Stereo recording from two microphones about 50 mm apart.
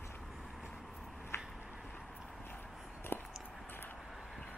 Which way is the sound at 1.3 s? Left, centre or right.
Left.